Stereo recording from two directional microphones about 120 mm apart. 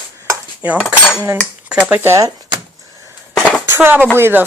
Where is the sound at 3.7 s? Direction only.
15° right (ahead or behind).